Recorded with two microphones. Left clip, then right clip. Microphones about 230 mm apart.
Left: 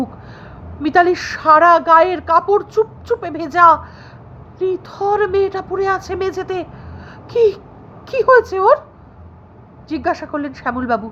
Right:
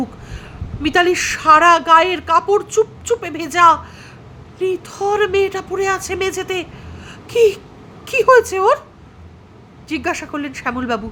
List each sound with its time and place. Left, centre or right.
0.0 s speech: right
9.9 s speech: right